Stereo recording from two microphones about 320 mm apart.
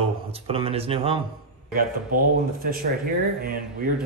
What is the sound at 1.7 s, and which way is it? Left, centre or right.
Speech, right.